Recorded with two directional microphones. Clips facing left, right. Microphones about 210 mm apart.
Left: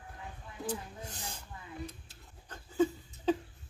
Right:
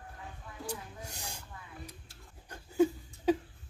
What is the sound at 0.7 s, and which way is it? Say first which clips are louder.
Speech: left 4 dB; 10° right (ahead or behind).